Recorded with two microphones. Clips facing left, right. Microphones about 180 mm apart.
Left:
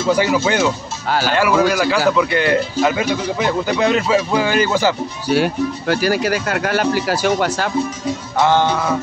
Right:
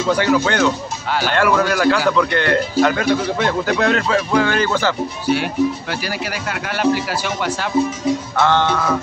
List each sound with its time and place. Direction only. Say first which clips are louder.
0.1 s a man's voice: left 1 dB; 10° left (ahead or behind)
5.3 s speech: left 1 dB; 40° left (ahead or behind)
8.4 s a man's voice: left 4 dB; 10° left (ahead or behind)